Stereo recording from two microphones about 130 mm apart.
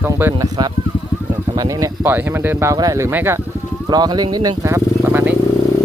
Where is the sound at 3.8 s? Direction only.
30° right (ahead or behind); by 5.3 s 15° right (ahead or behind).